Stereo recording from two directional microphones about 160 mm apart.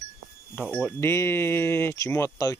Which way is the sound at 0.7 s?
10° left (ahead or behind).